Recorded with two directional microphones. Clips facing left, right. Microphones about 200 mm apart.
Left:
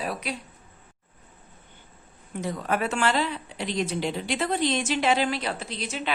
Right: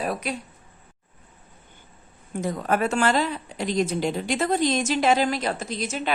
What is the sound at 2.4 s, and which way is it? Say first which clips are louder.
A woman's voice: right 3 dB; 45° right (ahead or behind).